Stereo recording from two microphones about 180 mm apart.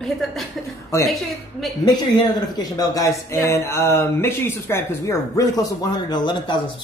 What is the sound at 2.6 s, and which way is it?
Speech, 20° left (ahead or behind).